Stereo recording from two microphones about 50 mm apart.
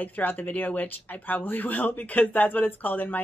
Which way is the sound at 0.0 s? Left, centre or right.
Left.